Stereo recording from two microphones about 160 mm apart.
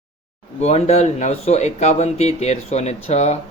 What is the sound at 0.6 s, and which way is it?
Speech, 45° left (ahead or behind).